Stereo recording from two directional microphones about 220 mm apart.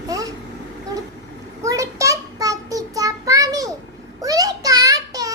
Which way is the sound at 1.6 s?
15° right (ahead or behind).